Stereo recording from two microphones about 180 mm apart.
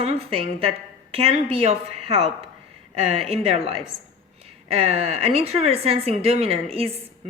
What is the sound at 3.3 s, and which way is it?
Speech, 35° right (ahead or behind).